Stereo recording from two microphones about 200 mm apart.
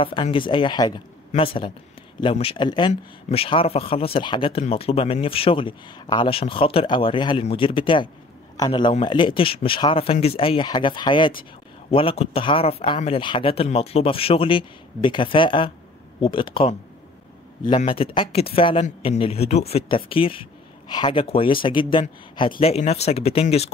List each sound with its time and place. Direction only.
0.0 s speech: 25° left (ahead or behind)